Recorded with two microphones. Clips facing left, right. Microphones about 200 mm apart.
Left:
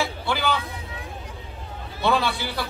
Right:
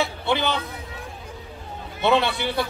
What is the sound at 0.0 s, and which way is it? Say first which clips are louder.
Speech: right 2 dB; 20° right (ahead or behind).